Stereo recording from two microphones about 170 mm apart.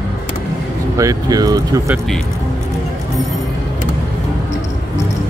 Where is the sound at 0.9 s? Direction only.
20° right (ahead or behind).